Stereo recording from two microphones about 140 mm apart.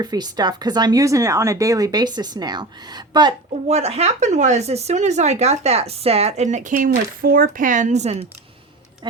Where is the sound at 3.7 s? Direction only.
50° right (ahead or behind).